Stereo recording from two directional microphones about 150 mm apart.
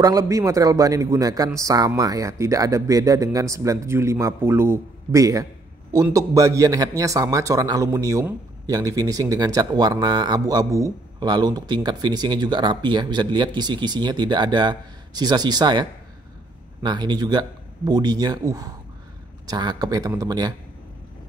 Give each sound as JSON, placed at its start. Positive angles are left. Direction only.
{"t": 0.0, "sound": "a man's voice", "side_deg": -20}